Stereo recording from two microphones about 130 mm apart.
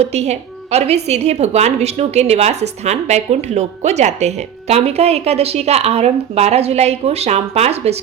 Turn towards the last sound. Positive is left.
turn(degrees=-55)  # may be behind; listen again after turning